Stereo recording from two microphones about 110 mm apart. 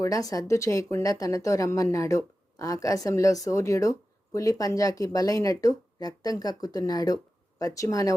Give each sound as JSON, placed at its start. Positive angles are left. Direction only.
{"t": 0.0, "sound": "speech", "side_deg": 30}